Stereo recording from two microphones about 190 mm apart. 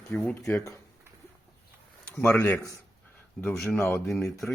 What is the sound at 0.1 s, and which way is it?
Speech, 10° left (ahead or behind).